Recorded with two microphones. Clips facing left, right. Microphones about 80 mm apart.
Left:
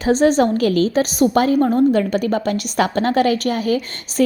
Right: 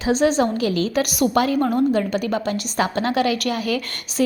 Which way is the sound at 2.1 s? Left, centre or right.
Left.